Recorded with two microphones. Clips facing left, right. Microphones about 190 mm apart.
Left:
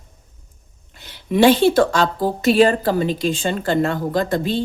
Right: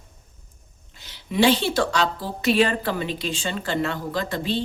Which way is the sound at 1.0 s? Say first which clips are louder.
Left 6 dB; 55° left (ahead or behind).